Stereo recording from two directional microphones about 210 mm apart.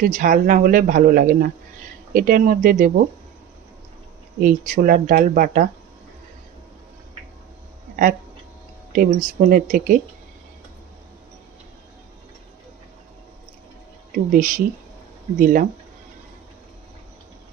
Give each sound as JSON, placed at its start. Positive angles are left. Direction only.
{"t": 0.0, "sound": "speech", "side_deg": -40}
{"t": 4.4, "sound": "speech", "side_deg": -40}
{"t": 7.9, "sound": "a sound", "side_deg": -40}
{"t": 8.9, "sound": "speech", "side_deg": -40}
{"t": 14.3, "sound": "speech", "side_deg": -40}